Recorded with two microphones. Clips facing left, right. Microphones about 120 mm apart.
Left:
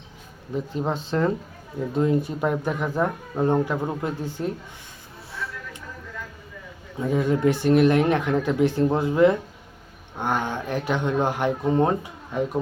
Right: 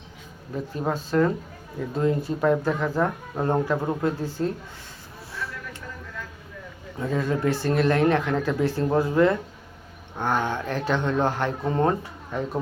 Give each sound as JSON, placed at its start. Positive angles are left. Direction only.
{"t": 0.5, "sound": "speech", "side_deg": 20}
{"t": 7.1, "sound": "speech", "side_deg": 15}